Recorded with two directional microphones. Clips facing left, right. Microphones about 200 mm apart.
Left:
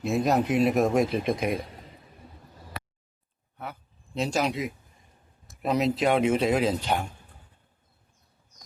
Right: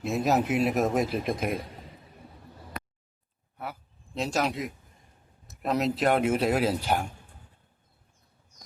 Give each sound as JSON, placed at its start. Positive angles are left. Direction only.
{"t": 0.0, "sound": "speech", "side_deg": 0}
{"t": 3.6, "sound": "speech", "side_deg": 0}